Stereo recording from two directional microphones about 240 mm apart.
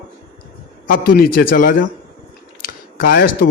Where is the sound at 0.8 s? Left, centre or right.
Left.